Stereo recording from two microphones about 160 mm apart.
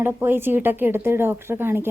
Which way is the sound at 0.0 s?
15° right (ahead or behind).